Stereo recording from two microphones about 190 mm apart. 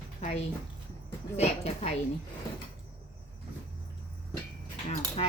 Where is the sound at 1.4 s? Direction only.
35° left (ahead or behind).